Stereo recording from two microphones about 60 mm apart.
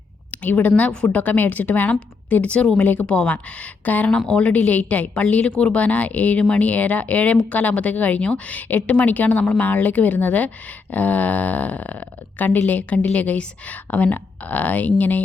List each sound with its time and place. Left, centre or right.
0.3 s a woman's voice: left
3.1 s speech: centre